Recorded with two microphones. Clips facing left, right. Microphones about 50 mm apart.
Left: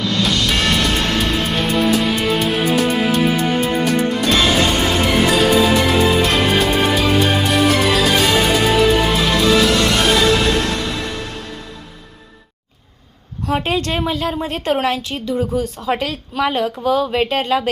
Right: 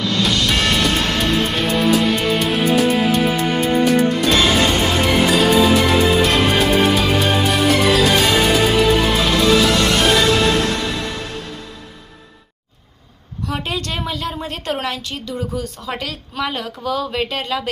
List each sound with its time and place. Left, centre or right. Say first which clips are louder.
0.0 s music: even; centre
13.5 s a sound: left 6 dB; left
14.1 s speech: left 4 dB; left